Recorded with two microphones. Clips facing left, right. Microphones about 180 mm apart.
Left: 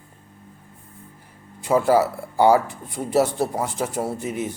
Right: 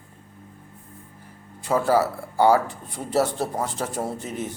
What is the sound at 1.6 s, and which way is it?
Speech, 15° left (ahead or behind).